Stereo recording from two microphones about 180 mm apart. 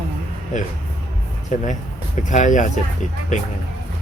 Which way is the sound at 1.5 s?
40° left (ahead or behind).